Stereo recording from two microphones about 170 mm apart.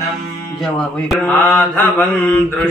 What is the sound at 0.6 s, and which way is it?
Mantra, 5° left (ahead or behind).